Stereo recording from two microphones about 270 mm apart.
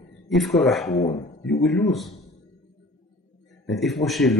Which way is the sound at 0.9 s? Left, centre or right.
Left.